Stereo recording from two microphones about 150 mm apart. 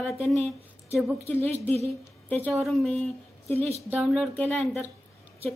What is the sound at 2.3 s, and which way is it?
Speech, 10° left (ahead or behind).